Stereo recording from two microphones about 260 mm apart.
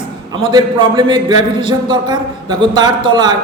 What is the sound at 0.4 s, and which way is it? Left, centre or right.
A man's voice, centre.